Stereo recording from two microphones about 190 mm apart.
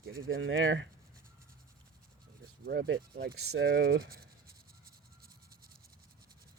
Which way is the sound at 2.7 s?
60° right (ahead or behind).